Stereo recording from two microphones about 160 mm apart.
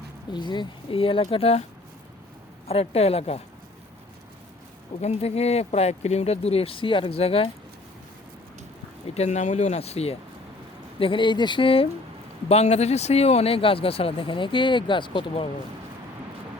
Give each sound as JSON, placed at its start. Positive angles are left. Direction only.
{"t": 0.3, "sound": "speech", "side_deg": 30}
{"t": 2.6, "sound": "speech", "side_deg": 40}
{"t": 4.9, "sound": "speech", "side_deg": 40}
{"t": 9.1, "sound": "speech", "side_deg": 45}